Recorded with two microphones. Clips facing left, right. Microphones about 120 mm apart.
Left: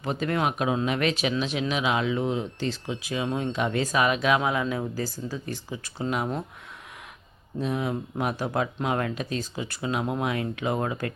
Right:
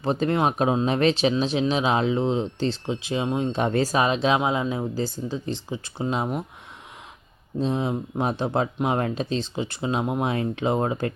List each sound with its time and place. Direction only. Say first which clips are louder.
0.0 s speech: right 4 dB; 30° right (ahead or behind)
3.6 s speech: right 2 dB; 35° right (ahead or behind)
7.6 s speech: right 3 dB; 30° right (ahead or behind)